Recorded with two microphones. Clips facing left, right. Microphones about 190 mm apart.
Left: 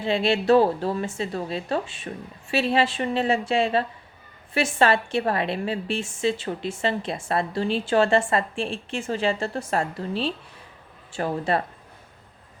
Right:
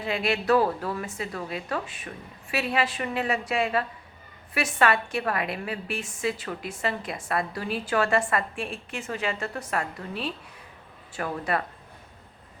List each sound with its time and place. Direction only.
0.0 s a woman's voice: 30° left (ahead or behind)